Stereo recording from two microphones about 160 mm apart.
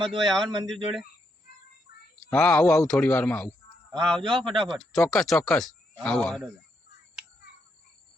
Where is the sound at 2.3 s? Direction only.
5° left (ahead or behind).